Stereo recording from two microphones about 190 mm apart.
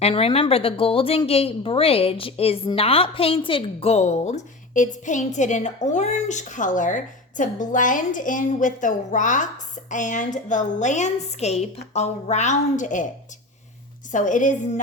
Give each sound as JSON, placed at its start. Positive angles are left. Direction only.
{"t": 0.0, "sound": "a woman's voice", "side_deg": 30}
{"t": 14.1, "sound": "a woman's voice", "side_deg": 40}